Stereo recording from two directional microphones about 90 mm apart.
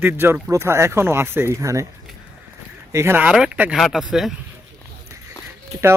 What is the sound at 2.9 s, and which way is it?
Speech, 30° right (ahead or behind).